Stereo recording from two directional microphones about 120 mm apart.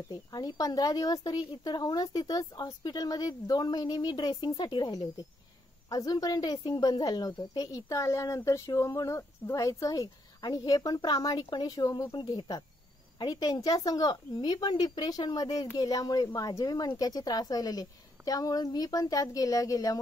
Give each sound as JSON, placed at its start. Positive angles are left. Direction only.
{"t": 0.1, "sound": "a woman's voice", "side_deg": 35}
{"t": 12.1, "sound": "a woman's voice", "side_deg": 40}